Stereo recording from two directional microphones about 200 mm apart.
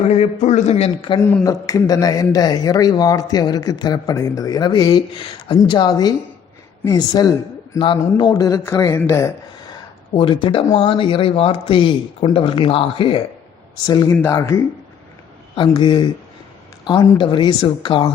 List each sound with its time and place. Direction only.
0.1 s a man's voice: 35° left (ahead or behind)
1.2 s a man's voice: 10° left (ahead or behind)
10.2 s a man's voice: 25° left (ahead or behind)